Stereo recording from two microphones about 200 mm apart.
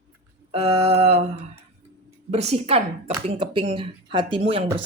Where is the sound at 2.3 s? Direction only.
30° right (ahead or behind).